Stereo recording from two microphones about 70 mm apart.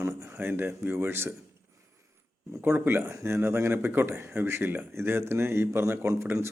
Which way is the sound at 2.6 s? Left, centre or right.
Right.